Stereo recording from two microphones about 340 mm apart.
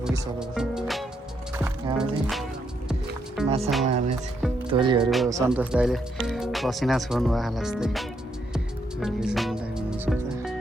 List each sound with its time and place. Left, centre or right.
0.0 s speech: centre
3.4 s music: centre
3.8 s speech: centre
5.1 s speech: centre
8.5 s music: centre